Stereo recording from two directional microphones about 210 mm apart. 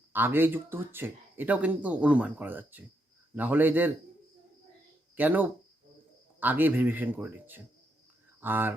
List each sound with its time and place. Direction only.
0.1 s speech: 10° right (ahead or behind)
5.1 s speech: 10° right (ahead or behind)